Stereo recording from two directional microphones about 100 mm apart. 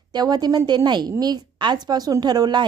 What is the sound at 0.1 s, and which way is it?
A woman's voice, 45° right (ahead or behind).